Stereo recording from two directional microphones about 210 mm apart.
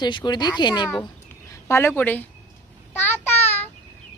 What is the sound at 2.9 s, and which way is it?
Child singing, 10° left (ahead or behind).